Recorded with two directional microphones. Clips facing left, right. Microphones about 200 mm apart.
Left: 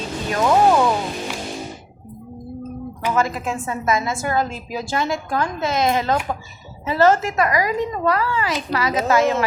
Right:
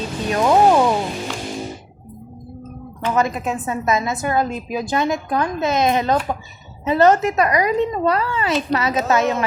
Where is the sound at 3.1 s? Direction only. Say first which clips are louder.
Right 2 dB; 20° right (ahead or behind).